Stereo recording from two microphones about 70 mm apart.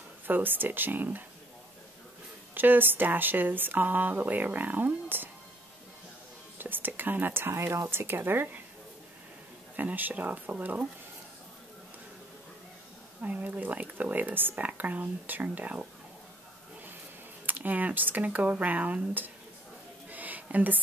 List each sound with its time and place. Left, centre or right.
0.3 s speech: right
2.5 s speech: right
6.6 s speech: right
9.8 s speech: right
13.2 s speech: centre
17.5 s speech: right
20.1 s a sound: right